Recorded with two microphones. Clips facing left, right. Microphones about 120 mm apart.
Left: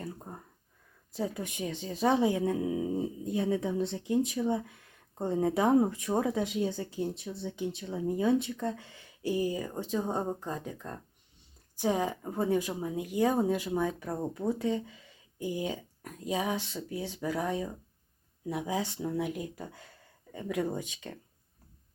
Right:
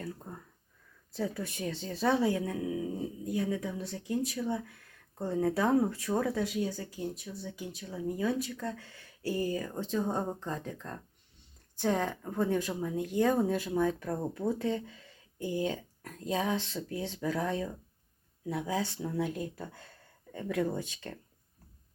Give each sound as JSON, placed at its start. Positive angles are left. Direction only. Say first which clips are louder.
{"t": 0.0, "sound": "speech", "louder": "even", "side_deg": 20}